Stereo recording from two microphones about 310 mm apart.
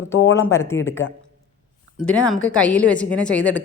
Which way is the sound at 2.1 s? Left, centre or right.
Centre.